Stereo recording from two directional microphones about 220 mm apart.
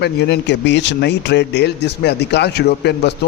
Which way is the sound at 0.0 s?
50° left (ahead or behind).